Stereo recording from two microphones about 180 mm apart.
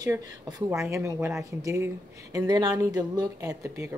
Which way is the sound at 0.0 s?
20° right (ahead or behind).